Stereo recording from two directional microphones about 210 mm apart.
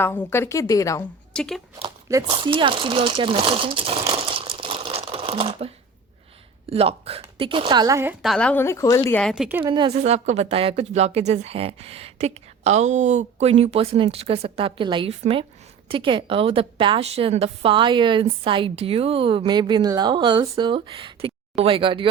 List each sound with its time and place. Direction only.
0.0 s a woman's voice: 10° left (ahead or behind)
1.3 s speech: 5° left (ahead or behind)
1.8 s speech: 20° right (ahead or behind)
8.2 s a woman's voice: centre (ahead or behind)
9.3 s a woman's voice: 5° right (ahead or behind)
9.7 s speech: 25° right (ahead or behind)